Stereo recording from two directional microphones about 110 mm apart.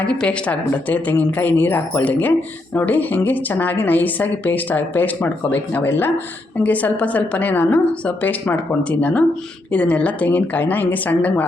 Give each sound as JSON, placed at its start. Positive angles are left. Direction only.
{"t": 0.1, "sound": "a woman's voice", "side_deg": 10}